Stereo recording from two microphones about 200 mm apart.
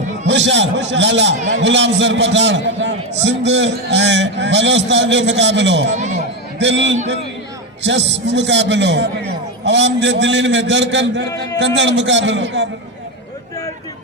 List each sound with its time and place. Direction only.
0.3 s a man's voice: 65° right (ahead or behind)